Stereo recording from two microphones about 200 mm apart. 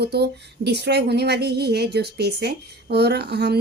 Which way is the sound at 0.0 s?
55° right (ahead or behind).